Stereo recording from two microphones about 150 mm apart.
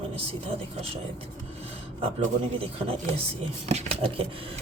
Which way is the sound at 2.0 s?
40° right (ahead or behind).